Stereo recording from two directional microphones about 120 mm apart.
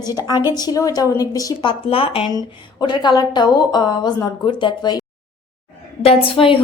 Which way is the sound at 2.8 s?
40° left (ahead or behind).